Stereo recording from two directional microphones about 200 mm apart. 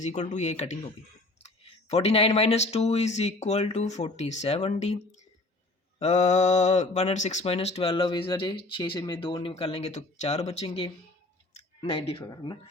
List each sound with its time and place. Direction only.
0.0 s speech: 35° left (ahead or behind)
6.0 s speech: 35° left (ahead or behind)